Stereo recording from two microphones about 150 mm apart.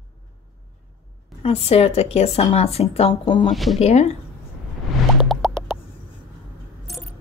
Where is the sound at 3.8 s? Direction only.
45° left (ahead or behind).